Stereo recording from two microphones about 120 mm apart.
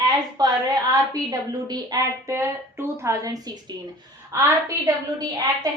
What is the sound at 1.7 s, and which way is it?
A woman's voice, 30° right (ahead or behind).